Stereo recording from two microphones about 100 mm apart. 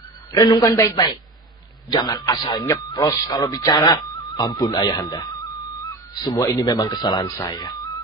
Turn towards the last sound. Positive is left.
turn(degrees=45)  # may be behind; listen again after turning